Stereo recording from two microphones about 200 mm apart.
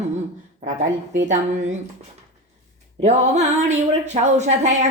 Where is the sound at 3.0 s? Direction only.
35° right (ahead or behind).